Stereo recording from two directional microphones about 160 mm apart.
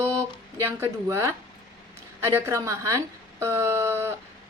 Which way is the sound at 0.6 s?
15° right (ahead or behind).